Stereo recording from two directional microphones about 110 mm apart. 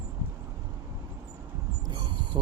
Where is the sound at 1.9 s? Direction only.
45° right (ahead or behind).